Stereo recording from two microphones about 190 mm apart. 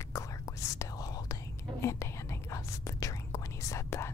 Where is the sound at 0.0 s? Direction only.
15° left (ahead or behind).